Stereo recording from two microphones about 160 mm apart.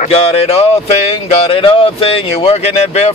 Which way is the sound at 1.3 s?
35° left (ahead or behind).